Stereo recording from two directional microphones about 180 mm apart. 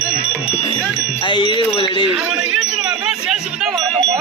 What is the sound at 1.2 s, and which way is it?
Speech, 25° left (ahead or behind).